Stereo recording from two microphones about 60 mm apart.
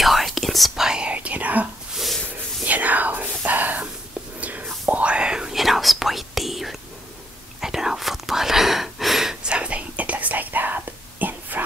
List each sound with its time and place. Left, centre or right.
0.0 s whispering: centre
0.8 s whispering: centre
1.1 s whispering: right
5.6 s whispering: centre; by 11.6 s right